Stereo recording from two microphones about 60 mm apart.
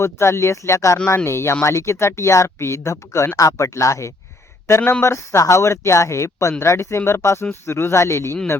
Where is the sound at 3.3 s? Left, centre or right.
Left.